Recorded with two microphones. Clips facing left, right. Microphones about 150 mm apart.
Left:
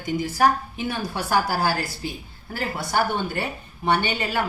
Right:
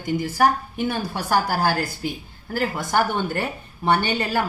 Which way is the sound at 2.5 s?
45° right (ahead or behind).